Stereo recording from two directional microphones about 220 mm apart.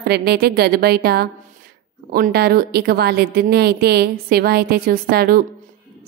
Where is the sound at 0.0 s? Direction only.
45° right (ahead or behind).